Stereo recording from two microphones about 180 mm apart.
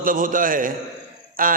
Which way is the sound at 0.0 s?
50° right (ahead or behind).